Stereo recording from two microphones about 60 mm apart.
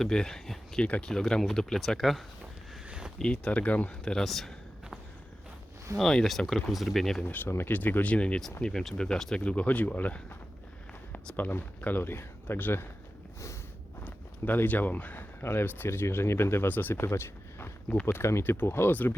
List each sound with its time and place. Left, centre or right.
0.0 s speech: centre
0.8 s speech: left
1.0 s speech: centre
2.8 s a sound: centre
3.2 s speech: centre
6.0 s speech: centre
7.3 s speech: left
8.1 s speech: centre
9.4 s speech: left
11.3 s speech: left
14.0 s speech: left
17.0 s a sound: left
18.0 s speech: left